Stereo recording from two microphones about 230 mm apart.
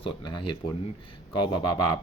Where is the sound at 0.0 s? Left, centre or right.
Centre.